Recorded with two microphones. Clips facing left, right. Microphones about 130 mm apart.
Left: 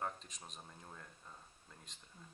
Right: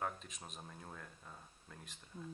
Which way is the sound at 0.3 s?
5° right (ahead or behind).